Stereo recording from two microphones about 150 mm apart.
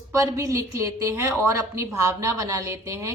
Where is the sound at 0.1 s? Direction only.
20° right (ahead or behind).